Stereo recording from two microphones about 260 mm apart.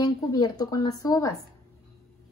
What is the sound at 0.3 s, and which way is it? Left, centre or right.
A woman's voice, centre.